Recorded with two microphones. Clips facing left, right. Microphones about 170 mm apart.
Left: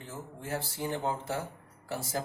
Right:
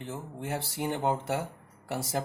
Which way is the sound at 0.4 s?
65° right (ahead or behind).